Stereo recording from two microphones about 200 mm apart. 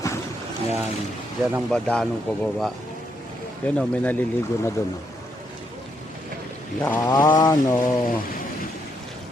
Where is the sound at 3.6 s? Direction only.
10° left (ahead or behind).